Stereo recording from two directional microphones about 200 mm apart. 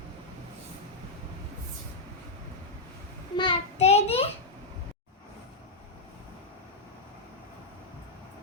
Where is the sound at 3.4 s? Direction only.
25° left (ahead or behind).